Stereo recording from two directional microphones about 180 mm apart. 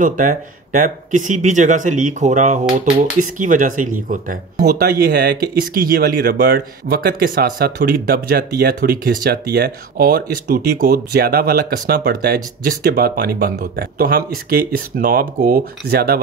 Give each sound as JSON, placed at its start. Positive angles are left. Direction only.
{"t": 0.0, "sound": "speech", "side_deg": -45}